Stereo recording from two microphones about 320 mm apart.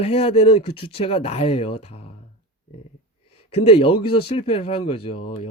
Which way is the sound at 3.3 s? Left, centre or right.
Centre.